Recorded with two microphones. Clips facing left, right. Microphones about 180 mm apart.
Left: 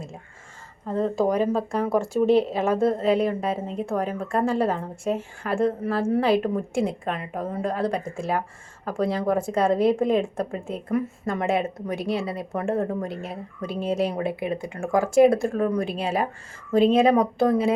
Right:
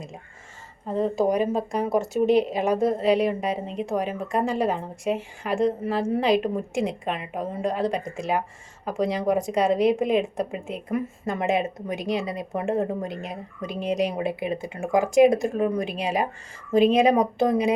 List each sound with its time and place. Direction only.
0.9 s a woman's voice: 15° right (ahead or behind)